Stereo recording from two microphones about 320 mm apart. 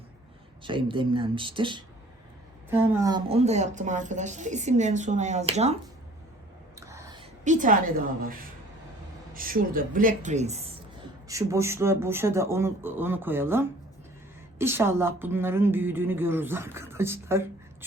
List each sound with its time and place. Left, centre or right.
0.6 s a woman's voice: centre
6.7 s a sound: centre; by 8.4 s right
9.3 s a woman's voice: right
11.3 s a woman's voice: centre